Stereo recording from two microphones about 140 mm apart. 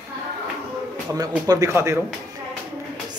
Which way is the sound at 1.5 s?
20° right (ahead or behind).